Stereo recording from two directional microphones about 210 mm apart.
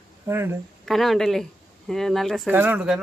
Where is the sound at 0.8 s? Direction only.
Centre (ahead or behind).